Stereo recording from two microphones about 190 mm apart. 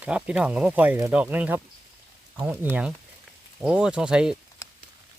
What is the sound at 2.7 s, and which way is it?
Speech, 5° right (ahead or behind).